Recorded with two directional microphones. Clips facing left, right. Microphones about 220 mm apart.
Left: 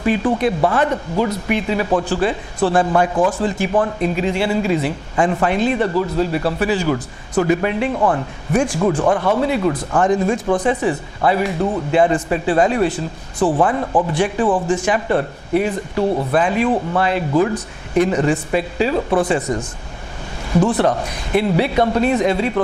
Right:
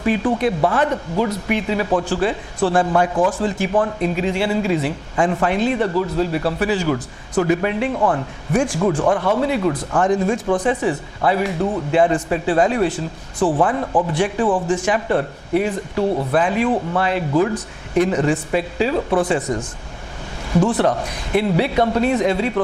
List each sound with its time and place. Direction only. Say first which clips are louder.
0.0 s a man's voice: left 1 dB; 15° left (ahead or behind); by 14.2 s 30° left (ahead or behind)
14.2 s a man's voice: left 1 dB; 15° left (ahead or behind)
20.5 s a man's voice: left 1 dB; 25° left (ahead or behind)
21.0 s a man's voice: left 1 dB; 10° left (ahead or behind)